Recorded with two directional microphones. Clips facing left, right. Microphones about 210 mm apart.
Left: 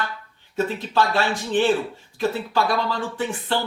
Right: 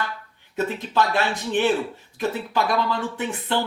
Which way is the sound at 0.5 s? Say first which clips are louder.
Left 1 dB; 20° right (ahead or behind).